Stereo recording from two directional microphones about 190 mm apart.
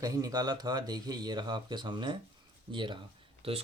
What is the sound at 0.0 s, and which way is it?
Speech, 20° right (ahead or behind).